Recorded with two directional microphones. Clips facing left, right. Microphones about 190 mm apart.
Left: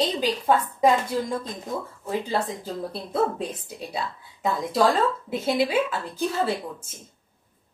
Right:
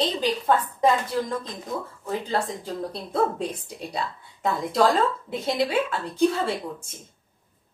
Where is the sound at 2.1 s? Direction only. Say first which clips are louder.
Left 1 dB; 5° left (ahead or behind).